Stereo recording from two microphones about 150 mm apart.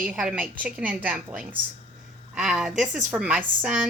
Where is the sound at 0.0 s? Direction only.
5° right (ahead or behind).